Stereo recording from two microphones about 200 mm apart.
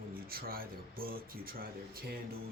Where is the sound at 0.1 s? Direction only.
50° right (ahead or behind).